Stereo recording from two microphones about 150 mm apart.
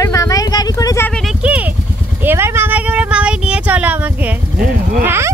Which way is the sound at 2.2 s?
15° right (ahead or behind).